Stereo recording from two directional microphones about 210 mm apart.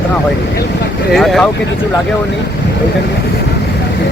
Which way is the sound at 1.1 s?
Centre (ahead or behind).